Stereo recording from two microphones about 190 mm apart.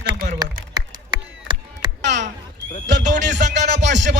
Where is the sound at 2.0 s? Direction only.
65° right (ahead or behind).